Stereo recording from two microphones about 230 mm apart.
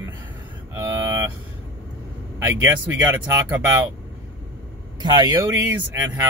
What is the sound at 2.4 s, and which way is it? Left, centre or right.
Speech, centre.